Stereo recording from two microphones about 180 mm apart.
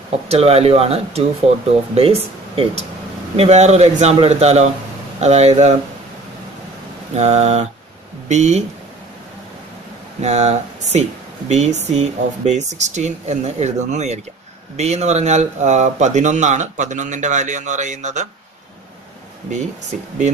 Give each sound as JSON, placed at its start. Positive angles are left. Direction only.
{"t": 0.1, "sound": "speech", "side_deg": -35}
{"t": 7.2, "sound": "speech", "side_deg": -35}
{"t": 10.2, "sound": "speech", "side_deg": -35}